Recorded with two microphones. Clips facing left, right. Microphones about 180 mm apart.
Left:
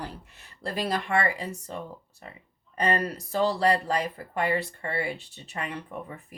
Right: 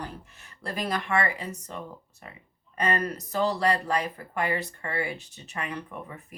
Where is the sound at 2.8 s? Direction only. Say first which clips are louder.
Left 1 dB; 35° left (ahead or behind).